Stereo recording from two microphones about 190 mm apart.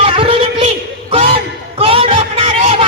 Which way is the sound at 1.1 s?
30° right (ahead or behind).